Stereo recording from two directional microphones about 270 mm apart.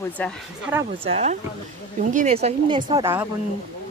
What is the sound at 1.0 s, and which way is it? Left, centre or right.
Speech, right.